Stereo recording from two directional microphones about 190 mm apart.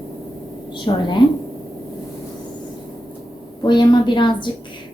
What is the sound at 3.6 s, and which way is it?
Speech, 25° left (ahead or behind).